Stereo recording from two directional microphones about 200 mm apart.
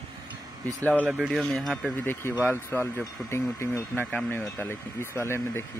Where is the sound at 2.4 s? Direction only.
10° left (ahead or behind).